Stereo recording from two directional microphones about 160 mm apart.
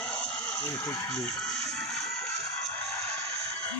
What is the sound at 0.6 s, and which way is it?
Speech, 20° left (ahead or behind).